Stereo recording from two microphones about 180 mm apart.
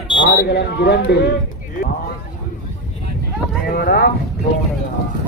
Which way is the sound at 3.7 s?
60° left (ahead or behind).